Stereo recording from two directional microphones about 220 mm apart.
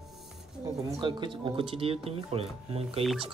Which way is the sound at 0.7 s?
15° right (ahead or behind).